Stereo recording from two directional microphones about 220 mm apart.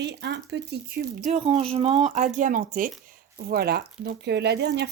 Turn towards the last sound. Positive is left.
turn(degrees=-50)  # may be behind; listen again after turning